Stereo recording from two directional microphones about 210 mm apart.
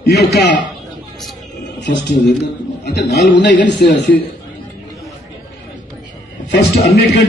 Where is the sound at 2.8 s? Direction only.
50° left (ahead or behind).